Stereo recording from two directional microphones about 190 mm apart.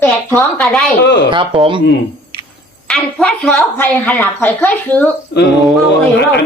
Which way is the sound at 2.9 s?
5° left (ahead or behind).